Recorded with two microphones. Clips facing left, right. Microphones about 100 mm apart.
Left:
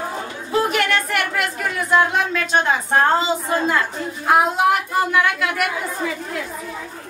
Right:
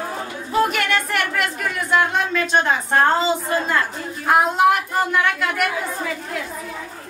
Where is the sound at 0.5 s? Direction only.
Centre (ahead or behind).